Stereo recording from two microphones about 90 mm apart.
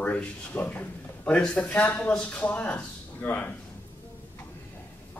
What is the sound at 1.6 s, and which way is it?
A man's voice, 20° left (ahead or behind).